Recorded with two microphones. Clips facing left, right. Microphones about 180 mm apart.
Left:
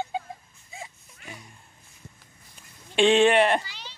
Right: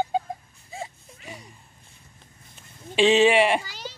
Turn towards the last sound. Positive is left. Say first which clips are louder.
# right 7 dB
turn(degrees=-40)  # may be behind; listen again after turning